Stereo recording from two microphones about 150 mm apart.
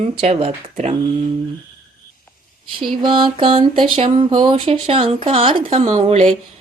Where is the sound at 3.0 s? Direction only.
35° right (ahead or behind).